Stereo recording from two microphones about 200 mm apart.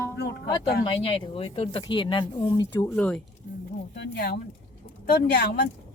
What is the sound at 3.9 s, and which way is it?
A woman's voice, 55° left (ahead or behind).